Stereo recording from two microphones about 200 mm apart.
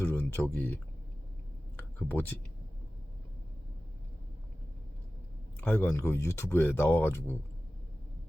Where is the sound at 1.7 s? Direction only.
10° left (ahead or behind).